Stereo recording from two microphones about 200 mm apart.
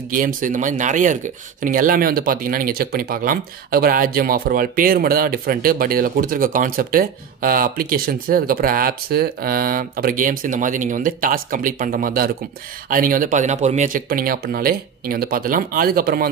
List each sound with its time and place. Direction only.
0.1 s speech: 40° right (ahead or behind)